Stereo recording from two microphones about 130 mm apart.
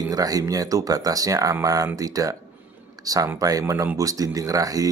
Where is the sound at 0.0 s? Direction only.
30° right (ahead or behind).